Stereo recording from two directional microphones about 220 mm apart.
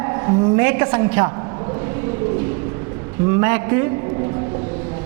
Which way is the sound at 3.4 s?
15° right (ahead or behind).